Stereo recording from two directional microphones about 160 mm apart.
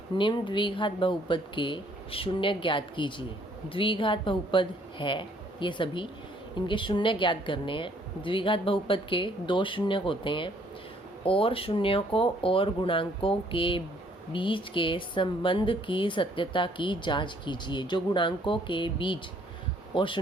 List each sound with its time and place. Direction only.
0.2 s speech: 30° left (ahead or behind)